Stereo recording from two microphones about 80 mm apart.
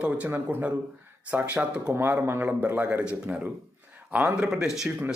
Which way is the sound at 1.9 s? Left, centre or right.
Right.